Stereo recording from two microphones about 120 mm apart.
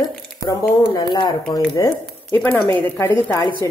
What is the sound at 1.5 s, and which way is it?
Speech, 30° left (ahead or behind).